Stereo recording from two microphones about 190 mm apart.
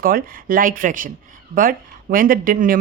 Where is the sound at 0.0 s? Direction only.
50° right (ahead or behind).